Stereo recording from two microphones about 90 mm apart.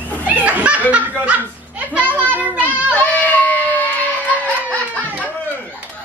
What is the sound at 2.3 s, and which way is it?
Child singing, 20° right (ahead or behind).